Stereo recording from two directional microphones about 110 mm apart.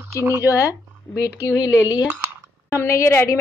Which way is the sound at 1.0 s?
10° left (ahead or behind).